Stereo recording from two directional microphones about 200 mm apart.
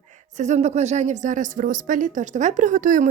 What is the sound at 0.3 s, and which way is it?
A woman's voice, 35° right (ahead or behind).